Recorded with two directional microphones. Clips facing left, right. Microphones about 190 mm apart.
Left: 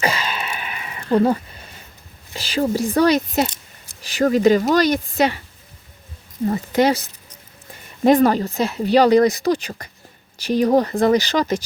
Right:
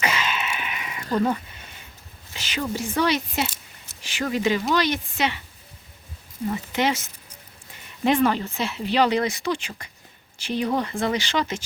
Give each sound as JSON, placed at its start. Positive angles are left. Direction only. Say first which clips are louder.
{"t": 0.0, "sound": "a sound", "louder": "left 3 dB", "side_deg": 35}
{"t": 1.1, "sound": "speech", "louder": "left 6 dB", "side_deg": 35}
{"t": 6.5, "sound": "speech", "louder": "left 7 dB", "side_deg": 40}